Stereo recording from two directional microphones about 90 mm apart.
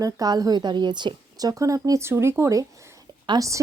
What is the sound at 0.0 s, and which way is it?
A woman's voice, 45° right (ahead or behind).